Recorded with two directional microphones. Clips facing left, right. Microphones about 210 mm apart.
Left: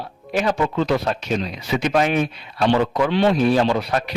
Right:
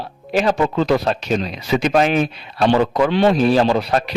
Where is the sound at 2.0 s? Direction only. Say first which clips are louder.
Right 3 dB; 90° right.